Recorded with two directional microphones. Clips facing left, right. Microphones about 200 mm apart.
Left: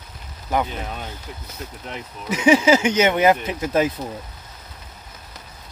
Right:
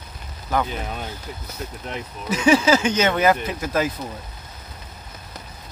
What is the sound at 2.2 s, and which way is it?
Speech, 15° left (ahead or behind).